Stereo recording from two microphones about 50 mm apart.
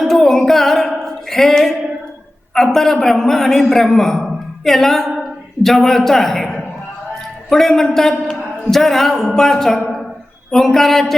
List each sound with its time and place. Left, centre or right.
0.0 s music: centre
2.6 s a man's voice: centre